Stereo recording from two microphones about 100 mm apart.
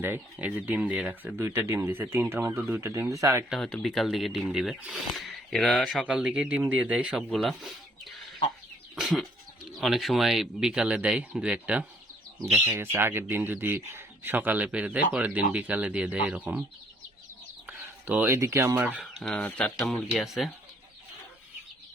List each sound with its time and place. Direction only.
0.0 s speech: 20° right (ahead or behind)
1.4 s speech: 25° right (ahead or behind)
3.6 s speech: 10° left (ahead or behind)
6.1 s speech: 10° right (ahead or behind)
9.0 s a sound: 5° right (ahead or behind)
9.7 s speech: centre (ahead or behind)
12.7 s speech: 25° right (ahead or behind)
17.7 s a sound: 15° right (ahead or behind)
18.3 s speech: 30° right (ahead or behind)
18.7 s speech: 15° right (ahead or behind)
19.1 s speech: 5° left (ahead or behind)